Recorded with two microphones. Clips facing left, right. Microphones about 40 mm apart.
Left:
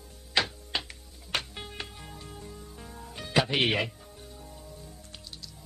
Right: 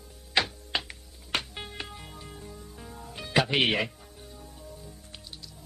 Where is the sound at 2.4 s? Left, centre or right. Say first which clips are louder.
Even; centre.